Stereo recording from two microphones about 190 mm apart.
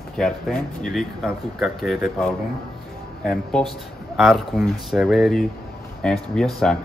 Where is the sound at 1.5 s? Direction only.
Centre (ahead or behind).